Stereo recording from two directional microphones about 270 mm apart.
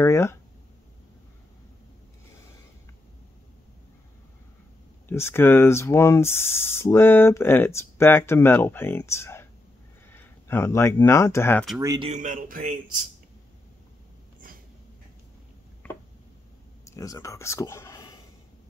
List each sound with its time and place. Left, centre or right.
0.0 s speech: centre
5.0 s speech: centre
11.8 s a man's voice: centre
12.1 s a man's voice: right
15.8 s a sound: centre
16.8 s speech: centre